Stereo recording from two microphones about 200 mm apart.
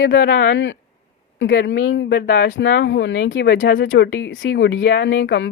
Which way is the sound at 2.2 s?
45° left (ahead or behind).